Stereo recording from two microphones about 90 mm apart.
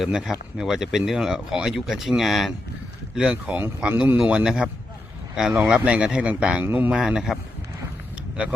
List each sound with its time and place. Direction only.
0.0 s speech: 5° right (ahead or behind)
4.2 s speech: 5° right (ahead or behind); by 6.9 s 25° right (ahead or behind)
6.9 s speech: 10° right (ahead or behind)